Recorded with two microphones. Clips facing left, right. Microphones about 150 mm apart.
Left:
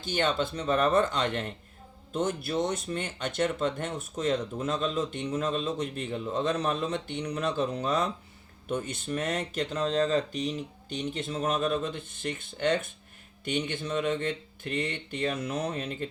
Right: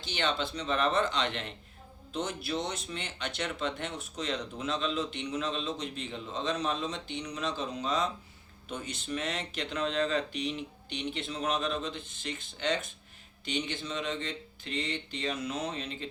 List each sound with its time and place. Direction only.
0.0 s speech: 45° left (ahead or behind)